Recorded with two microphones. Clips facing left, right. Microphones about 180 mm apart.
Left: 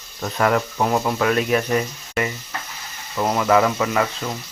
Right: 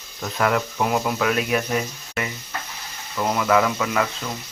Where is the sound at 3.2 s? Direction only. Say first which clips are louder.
Left 2 dB; 20° left (ahead or behind).